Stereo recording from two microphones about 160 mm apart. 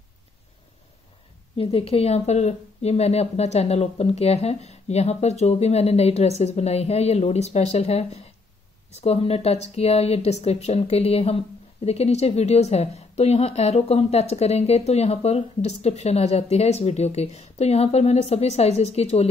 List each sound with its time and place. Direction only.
1.6 s speech: 35° left (ahead or behind)